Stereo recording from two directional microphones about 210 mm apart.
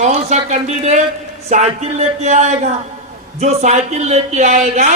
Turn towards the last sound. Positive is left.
turn(degrees=-35)  # may be behind; listen again after turning